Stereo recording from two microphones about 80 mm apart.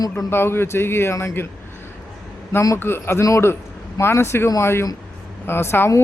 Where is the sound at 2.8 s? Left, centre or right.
Left.